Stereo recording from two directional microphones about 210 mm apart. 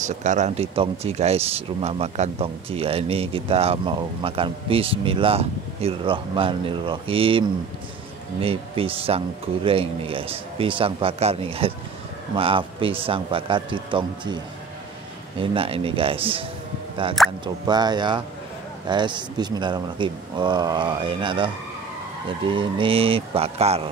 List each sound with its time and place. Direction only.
0.0 s speech: 35° right (ahead or behind)
17.2 s speech: centre (ahead or behind)
17.6 s speech: 20° right (ahead or behind)
22.5 s speech: 25° right (ahead or behind)